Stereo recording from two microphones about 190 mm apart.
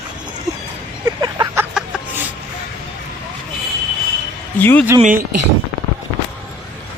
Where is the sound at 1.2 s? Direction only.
20° right (ahead or behind).